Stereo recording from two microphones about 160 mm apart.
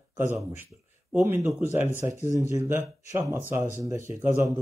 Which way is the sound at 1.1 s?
10° right (ahead or behind).